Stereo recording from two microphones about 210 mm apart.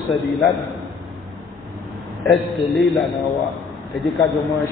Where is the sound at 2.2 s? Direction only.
Centre (ahead or behind).